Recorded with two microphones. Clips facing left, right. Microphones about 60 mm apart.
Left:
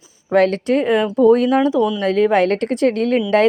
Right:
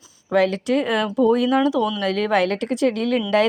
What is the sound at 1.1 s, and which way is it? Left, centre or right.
Speech, left.